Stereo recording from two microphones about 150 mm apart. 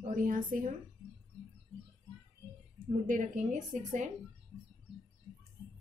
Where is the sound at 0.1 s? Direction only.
65° right (ahead or behind).